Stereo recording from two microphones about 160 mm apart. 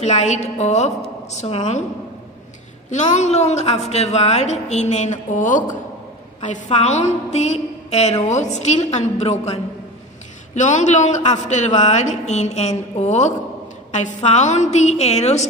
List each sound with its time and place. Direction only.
0.0 s a woman's voice: 45° left (ahead or behind)
2.9 s a woman's voice: 45° left (ahead or behind)